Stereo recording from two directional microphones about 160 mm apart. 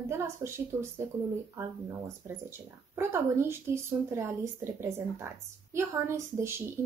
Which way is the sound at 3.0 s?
15° right (ahead or behind).